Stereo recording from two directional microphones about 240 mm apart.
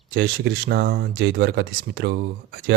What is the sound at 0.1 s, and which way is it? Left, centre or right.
Speech, right.